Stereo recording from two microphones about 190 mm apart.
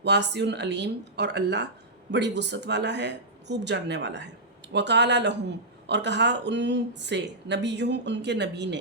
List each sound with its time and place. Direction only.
0.0 s a woman's voice: 65° right (ahead or behind)